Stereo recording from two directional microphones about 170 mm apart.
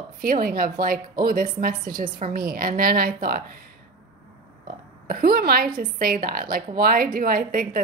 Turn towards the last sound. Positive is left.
turn(degrees=-55)  # may be behind; listen again after turning